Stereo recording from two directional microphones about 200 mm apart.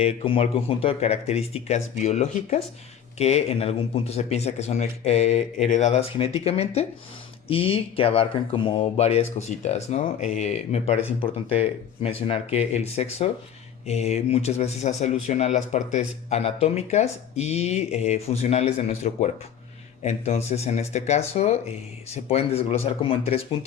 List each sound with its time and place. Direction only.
0.0 s speech: 30° left (ahead or behind)